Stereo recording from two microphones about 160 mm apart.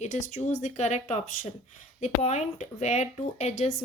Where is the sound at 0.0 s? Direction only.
50° left (ahead or behind).